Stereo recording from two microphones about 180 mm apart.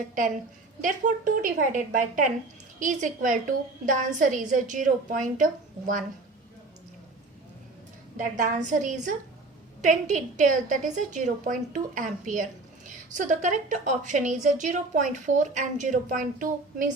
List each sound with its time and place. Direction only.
0.8 s a woman's voice: 45° right (ahead or behind)
8.1 s a woman's voice: 45° right (ahead or behind)